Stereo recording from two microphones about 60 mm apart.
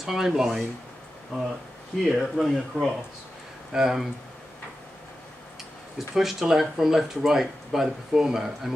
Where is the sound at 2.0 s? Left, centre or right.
Centre.